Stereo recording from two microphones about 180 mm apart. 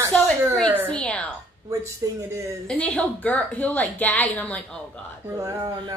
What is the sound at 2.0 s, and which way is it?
Child singing, 20° right (ahead or behind).